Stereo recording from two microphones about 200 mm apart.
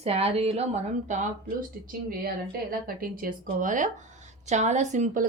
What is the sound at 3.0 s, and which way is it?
Speech, 40° right (ahead or behind).